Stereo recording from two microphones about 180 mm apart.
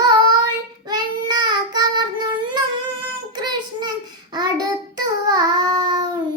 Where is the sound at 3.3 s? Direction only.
25° right (ahead or behind).